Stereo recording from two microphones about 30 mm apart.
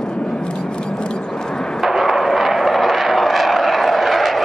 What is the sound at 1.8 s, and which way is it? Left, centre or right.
Vehicle, centre.